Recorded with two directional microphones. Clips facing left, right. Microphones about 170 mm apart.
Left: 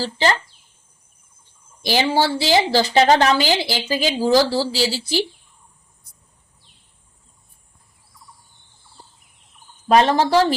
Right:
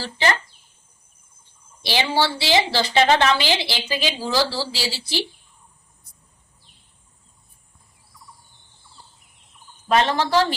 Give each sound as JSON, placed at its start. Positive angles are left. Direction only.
{"t": 1.8, "sound": "a woman's voice", "side_deg": 45}
{"t": 9.9, "sound": "a woman's voice", "side_deg": 40}